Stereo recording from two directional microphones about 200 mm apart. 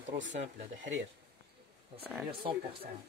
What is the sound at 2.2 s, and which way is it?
Speech, 25° right (ahead or behind).